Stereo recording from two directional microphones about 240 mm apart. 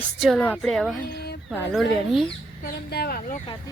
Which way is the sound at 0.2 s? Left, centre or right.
Centre.